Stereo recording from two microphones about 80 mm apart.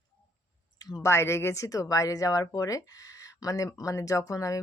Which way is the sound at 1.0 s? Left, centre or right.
Left.